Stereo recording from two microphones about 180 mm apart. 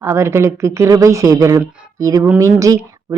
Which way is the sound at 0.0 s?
15° right (ahead or behind).